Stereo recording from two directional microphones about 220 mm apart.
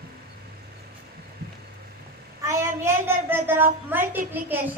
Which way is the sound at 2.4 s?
15° right (ahead or behind).